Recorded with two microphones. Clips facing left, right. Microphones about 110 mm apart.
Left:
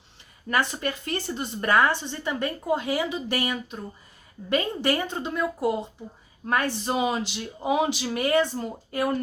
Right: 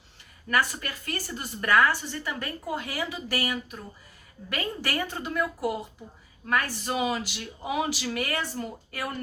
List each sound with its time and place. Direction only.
0.5 s a woman's voice: 25° left (ahead or behind)